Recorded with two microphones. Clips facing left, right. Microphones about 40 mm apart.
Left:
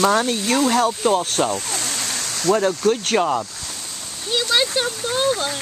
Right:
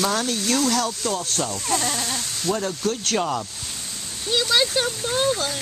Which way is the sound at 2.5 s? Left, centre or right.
Left.